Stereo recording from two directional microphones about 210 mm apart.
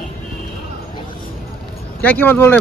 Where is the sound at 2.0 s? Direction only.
5° left (ahead or behind).